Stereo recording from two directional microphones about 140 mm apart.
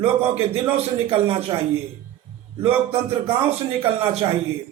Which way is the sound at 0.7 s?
45° right (ahead or behind).